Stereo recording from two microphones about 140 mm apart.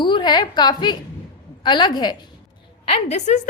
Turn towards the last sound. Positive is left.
turn(degrees=55)  # may be behind; listen again after turning